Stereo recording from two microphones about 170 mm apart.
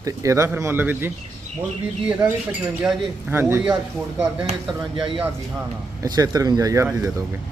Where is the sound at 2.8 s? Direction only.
10° right (ahead or behind).